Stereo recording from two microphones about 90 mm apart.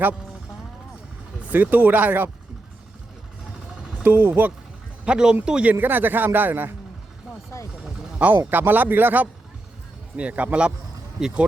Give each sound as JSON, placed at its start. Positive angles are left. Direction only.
{"t": 1.4, "sound": "a man's voice", "side_deg": -20}
{"t": 4.0, "sound": "a man's voice", "side_deg": -25}
{"t": 5.0, "sound": "speech", "side_deg": -10}
{"t": 5.7, "sound": "a man's voice", "side_deg": -20}
{"t": 8.4, "sound": "a man's voice", "side_deg": -20}